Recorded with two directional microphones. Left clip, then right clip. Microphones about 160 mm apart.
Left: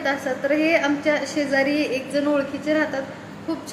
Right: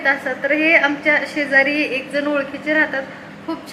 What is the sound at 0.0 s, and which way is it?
A woman's voice, 15° left (ahead or behind).